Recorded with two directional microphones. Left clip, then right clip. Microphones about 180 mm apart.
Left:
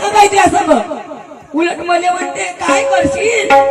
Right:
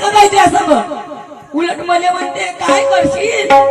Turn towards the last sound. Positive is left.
turn(degrees=-10)  # may be behind; listen again after turning